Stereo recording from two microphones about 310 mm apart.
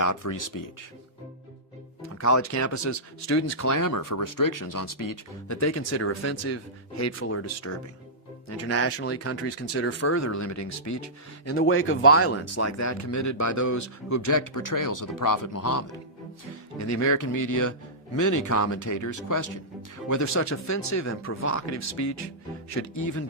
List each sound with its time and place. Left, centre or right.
0.0 s speech: left
2.1 s speech: left
11.5 s speech: left
16.7 s speech: left
20.1 s speech: left